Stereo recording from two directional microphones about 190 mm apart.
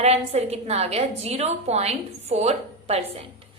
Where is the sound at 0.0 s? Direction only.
35° right (ahead or behind).